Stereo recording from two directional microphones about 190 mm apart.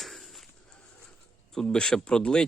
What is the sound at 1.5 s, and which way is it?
Speech, 5° left (ahead or behind).